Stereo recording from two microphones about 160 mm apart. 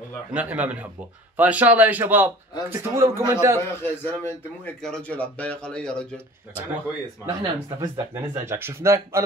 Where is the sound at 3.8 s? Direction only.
15° left (ahead or behind).